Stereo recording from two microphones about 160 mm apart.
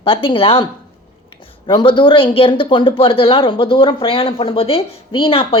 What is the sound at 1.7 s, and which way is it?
A woman's voice, 30° left (ahead or behind).